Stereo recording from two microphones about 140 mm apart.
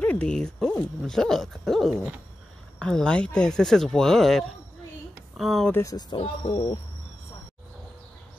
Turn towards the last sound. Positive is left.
turn(degrees=35)  # may be behind; listen again after turning